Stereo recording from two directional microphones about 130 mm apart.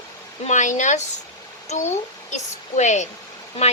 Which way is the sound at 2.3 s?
65° left (ahead or behind).